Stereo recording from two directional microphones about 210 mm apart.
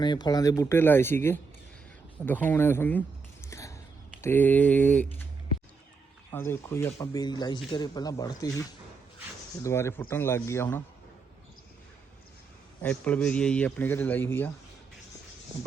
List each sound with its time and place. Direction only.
0.0 s speech: 20° left (ahead or behind)
3.5 s biting: 15° left (ahead or behind)
4.2 s speech: 10° left (ahead or behind)
6.3 s speech: 10° left (ahead or behind)
9.6 s speech: 15° left (ahead or behind)
12.8 s speech: 5° left (ahead or behind)